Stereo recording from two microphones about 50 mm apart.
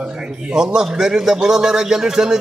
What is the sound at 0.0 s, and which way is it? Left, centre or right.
A man's voice, centre.